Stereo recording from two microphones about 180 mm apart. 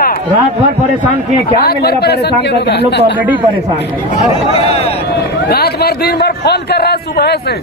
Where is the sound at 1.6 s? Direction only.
60° left (ahead or behind).